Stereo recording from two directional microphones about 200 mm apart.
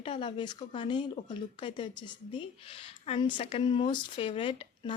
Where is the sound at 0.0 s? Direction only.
25° left (ahead or behind).